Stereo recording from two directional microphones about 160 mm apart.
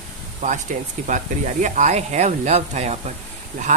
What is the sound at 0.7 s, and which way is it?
Speech, 50° right (ahead or behind).